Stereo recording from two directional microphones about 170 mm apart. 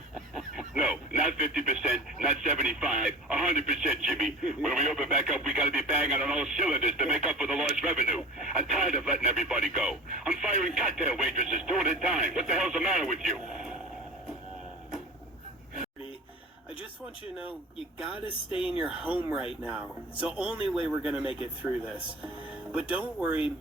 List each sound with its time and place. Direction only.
0.1 s a sound: centre (ahead or behind)
0.8 s speech: 5° right (ahead or behind)
17.3 s speech: 5° right (ahead or behind)
21.2 s speech: 35° left (ahead or behind)
21.6 s speech: 5° right (ahead or behind)